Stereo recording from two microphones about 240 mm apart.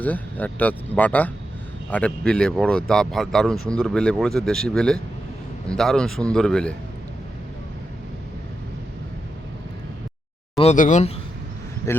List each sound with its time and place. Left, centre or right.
0.0 s speech: centre
10.6 s speech: left